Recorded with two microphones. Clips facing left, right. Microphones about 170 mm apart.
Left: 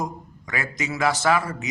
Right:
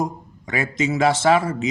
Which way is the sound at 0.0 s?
25° right (ahead or behind).